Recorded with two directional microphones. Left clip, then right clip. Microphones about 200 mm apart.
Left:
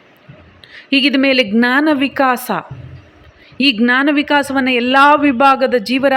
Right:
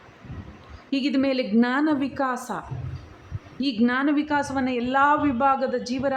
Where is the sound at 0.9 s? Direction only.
20° left (ahead or behind).